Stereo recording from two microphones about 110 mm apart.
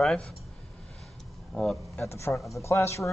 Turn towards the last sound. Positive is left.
turn(degrees=25)  # may be behind; listen again after turning